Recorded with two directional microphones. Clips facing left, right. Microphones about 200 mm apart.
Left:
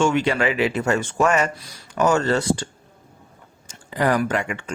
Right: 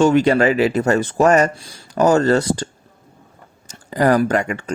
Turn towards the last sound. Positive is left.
turn(degrees=-40)  # may be behind; listen again after turning